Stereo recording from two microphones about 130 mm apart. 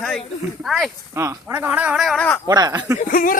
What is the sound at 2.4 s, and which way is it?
Speech, 30° right (ahead or behind).